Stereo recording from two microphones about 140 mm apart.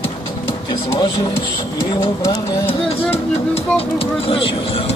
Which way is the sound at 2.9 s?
45° left (ahead or behind).